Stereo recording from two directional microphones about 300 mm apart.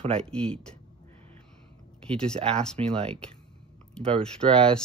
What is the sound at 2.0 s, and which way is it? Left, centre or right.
Speech, centre.